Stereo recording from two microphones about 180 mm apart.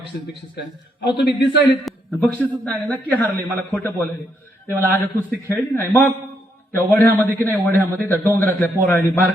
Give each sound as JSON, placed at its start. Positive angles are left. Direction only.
{"t": 1.0, "sound": "a man's voice", "side_deg": 65}
{"t": 1.6, "sound": "a man's voice", "side_deg": 0}